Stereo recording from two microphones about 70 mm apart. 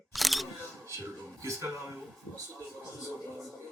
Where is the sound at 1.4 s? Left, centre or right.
Right.